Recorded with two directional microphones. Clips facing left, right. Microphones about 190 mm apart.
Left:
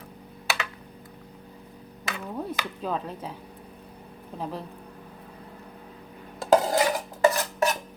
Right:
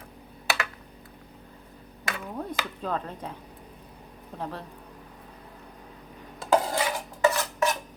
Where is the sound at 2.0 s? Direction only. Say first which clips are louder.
Left 1 dB; 5° left (ahead or behind).